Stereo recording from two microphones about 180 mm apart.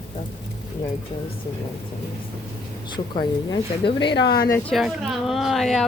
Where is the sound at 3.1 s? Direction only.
25° left (ahead or behind).